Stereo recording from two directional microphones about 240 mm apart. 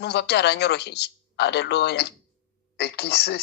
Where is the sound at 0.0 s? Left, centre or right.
Left.